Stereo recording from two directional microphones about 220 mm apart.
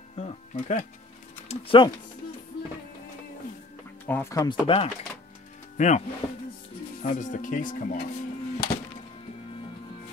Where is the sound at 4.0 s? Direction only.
10° left (ahead or behind).